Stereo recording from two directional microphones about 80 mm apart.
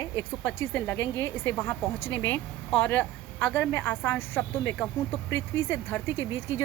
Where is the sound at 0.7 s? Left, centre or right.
Left.